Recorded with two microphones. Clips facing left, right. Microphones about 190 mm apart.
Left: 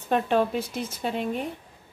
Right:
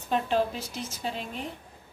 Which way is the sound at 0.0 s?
55° left (ahead or behind).